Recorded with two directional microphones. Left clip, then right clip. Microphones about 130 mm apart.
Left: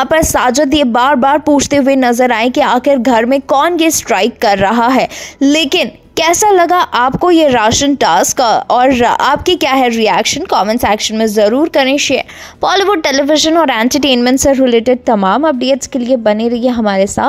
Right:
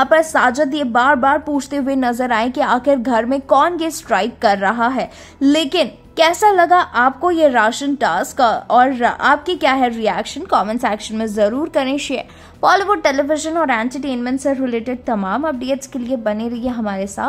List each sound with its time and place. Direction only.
0.1 s a woman's voice: 35° left (ahead or behind)
1.5 s a woman's voice: 30° left (ahead or behind)
5.4 s a woman's voice: 30° left (ahead or behind)
12.6 s a woman's voice: 35° left (ahead or behind)
13.6 s a woman's voice: 50° left (ahead or behind)